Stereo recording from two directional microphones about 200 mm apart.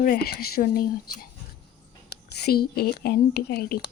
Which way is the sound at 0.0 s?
50° left (ahead or behind).